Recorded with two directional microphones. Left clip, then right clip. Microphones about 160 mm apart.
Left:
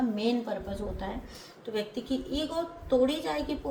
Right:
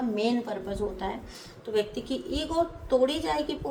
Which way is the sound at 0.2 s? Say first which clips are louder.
Right 2 dB; 45° right (ahead or behind).